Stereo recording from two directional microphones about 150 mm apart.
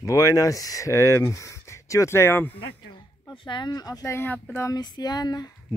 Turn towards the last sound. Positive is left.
turn(degrees=25)  # may be behind; listen again after turning